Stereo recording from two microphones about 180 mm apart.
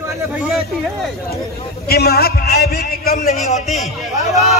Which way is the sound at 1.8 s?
60° left (ahead or behind).